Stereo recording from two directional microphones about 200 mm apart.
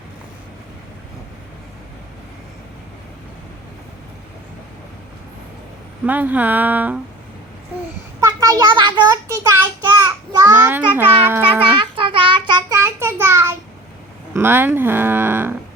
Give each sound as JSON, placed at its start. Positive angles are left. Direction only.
{"t": 6.1, "sound": "speech", "side_deg": -10}
{"t": 8.2, "sound": "a child's voice", "side_deg": -15}
{"t": 9.9, "sound": "child singing", "side_deg": -20}
{"t": 10.5, "sound": "speech", "side_deg": -10}
{"t": 11.6, "sound": "child singing", "side_deg": -25}
{"t": 14.3, "sound": "speech", "side_deg": -10}